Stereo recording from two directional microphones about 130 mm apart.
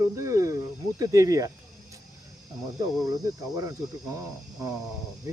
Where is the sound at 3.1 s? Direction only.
25° right (ahead or behind).